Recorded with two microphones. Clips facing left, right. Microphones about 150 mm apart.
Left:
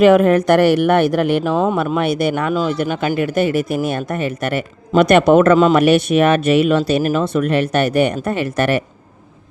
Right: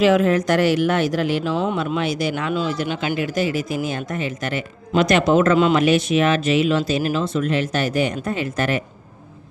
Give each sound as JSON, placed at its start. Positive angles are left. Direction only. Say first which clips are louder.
{"t": 0.0, "sound": "speech", "louder": "left 5 dB", "side_deg": 55}